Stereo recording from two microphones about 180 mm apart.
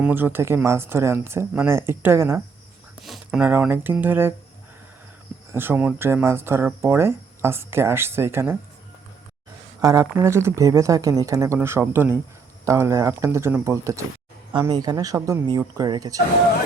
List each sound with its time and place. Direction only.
0.0 s speech: 10° right (ahead or behind)
3.0 s speech: centre (ahead or behind)
5.5 s speech: 10° right (ahead or behind)
9.8 s speech: 20° right (ahead or behind)